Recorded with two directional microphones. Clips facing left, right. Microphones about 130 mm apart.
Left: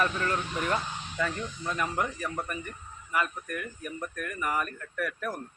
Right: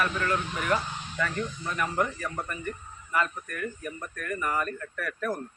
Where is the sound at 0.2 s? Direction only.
30° left (ahead or behind).